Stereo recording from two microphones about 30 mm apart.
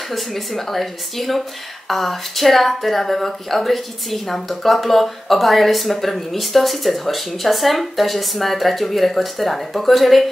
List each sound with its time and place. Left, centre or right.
0.1 s speech: centre